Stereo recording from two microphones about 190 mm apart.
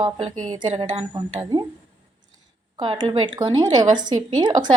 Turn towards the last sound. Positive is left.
turn(degrees=-20)  # may be behind; listen again after turning